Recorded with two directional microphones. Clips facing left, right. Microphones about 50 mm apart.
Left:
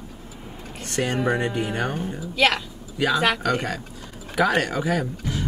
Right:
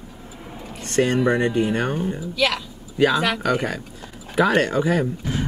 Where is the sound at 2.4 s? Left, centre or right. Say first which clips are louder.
Left 2 dB; left.